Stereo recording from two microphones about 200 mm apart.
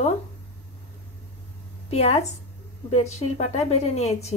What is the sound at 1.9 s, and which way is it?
A woman's voice, 30° left (ahead or behind).